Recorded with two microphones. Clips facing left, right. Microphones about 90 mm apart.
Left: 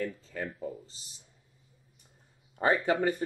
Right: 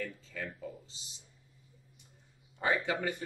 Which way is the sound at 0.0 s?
40° left (ahead or behind).